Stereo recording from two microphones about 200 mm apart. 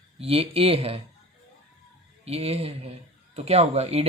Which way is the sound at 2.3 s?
30° right (ahead or behind).